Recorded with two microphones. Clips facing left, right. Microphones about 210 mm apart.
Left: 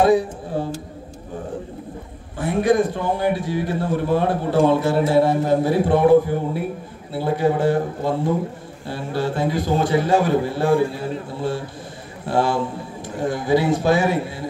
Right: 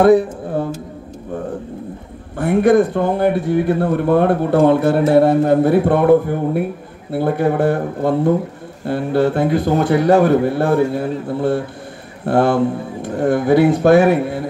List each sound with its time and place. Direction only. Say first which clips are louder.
0.0 s speech: right 5 dB; 60° right (ahead or behind)
2.3 s speech: right 5 dB; 60° right (ahead or behind)